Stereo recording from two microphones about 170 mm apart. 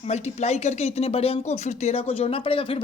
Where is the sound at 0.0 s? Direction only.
40° left (ahead or behind).